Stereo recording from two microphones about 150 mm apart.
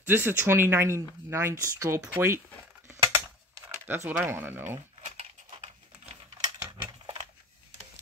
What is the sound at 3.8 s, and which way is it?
Speech, 15° right (ahead or behind).